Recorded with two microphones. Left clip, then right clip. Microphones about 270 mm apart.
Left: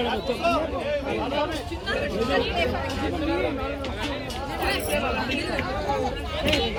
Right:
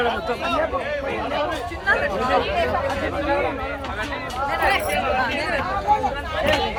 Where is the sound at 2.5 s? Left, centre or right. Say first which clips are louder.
Right 5 dB; centre.